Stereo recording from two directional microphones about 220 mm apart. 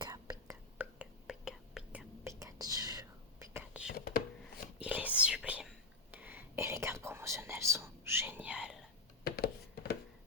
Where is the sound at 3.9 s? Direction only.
45° left (ahead or behind).